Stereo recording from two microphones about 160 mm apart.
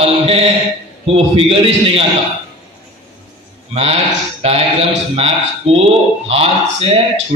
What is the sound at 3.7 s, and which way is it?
A man's voice, 40° right (ahead or behind).